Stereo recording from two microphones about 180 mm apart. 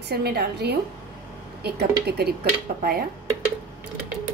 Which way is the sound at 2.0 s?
60° right (ahead or behind).